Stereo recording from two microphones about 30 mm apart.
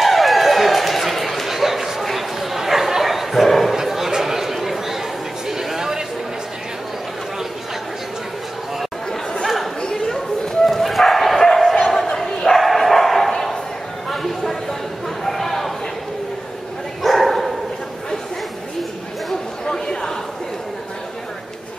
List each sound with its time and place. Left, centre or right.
0.0 s dog: centre
3.7 s chatter: centre
5.5 s a sound: centre
9.8 s chatter: left
10.7 s bow-wow: centre
11.8 s battle cry: centre
12.2 s bow-wow: centre
14.1 s a sound: centre
17.0 s dog: centre
19.6 s chatter: left